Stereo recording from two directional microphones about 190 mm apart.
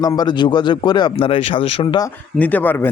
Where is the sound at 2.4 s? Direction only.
10° left (ahead or behind).